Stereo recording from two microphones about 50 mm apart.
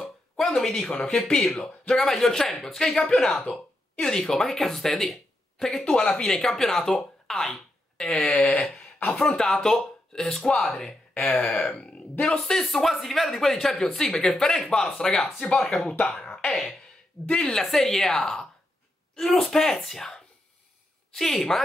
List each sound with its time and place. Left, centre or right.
0.0 s a sound: centre
1.1 s speech: centre
4.0 s speech: centre
5.9 s speech: centre
11.2 s throat clearing: left
11.7 s a sound: centre
12.3 s speech: centre
17.3 s throat clearing: left
17.6 s speech: centre